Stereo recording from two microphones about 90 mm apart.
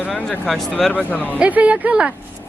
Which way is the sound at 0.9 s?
15° left (ahead or behind).